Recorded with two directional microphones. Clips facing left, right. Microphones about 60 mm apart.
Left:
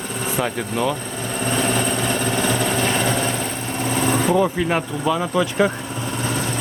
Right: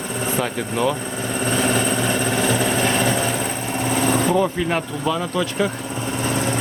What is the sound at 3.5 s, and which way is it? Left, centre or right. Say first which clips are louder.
Vehicle: right 1 dB; centre.